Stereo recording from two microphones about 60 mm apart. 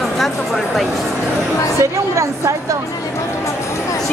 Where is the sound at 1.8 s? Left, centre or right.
Right.